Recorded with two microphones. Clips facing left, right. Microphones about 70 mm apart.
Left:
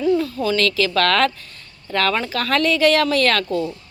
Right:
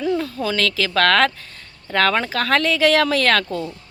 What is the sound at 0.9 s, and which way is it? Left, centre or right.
Speech, right.